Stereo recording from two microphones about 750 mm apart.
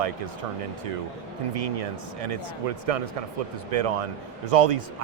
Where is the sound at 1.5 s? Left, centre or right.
Right.